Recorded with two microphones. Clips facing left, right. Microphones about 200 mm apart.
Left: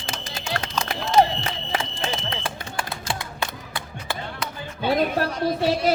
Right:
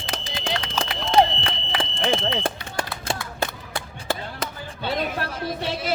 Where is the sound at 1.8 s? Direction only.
55° right (ahead or behind).